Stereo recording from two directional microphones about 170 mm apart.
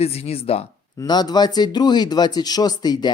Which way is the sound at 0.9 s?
25° left (ahead or behind).